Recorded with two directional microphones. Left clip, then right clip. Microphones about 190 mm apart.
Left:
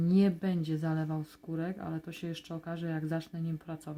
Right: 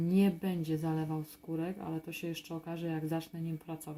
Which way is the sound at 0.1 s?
40° left (ahead or behind).